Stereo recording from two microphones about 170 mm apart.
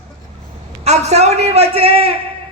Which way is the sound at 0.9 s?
40° right (ahead or behind).